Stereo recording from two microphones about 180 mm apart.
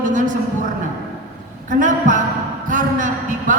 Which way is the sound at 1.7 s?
45° right (ahead or behind).